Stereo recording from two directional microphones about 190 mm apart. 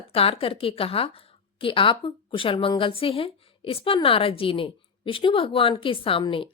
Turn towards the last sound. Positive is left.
turn(degrees=25)  # may be behind; listen again after turning